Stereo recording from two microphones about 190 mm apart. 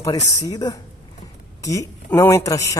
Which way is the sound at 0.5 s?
20° left (ahead or behind).